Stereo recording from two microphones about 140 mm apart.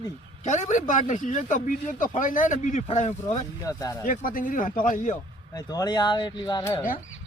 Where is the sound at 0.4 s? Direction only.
60° left (ahead or behind).